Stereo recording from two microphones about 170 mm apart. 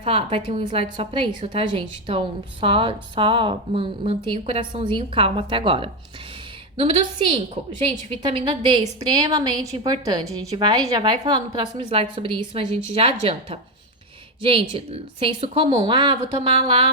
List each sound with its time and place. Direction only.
0.0 s a woman's voice: 35° right (ahead or behind)